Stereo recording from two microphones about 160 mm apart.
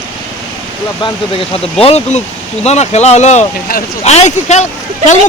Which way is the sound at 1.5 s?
40° left (ahead or behind).